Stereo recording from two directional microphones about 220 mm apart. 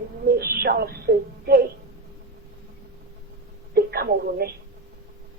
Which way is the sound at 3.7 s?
45° right (ahead or behind).